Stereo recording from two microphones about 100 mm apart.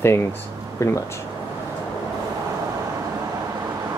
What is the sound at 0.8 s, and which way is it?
Speech, 30° left (ahead or behind).